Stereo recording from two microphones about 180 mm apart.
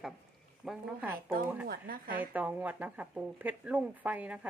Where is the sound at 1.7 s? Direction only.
55° right (ahead or behind).